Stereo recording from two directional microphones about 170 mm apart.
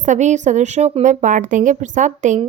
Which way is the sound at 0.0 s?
45° right (ahead or behind).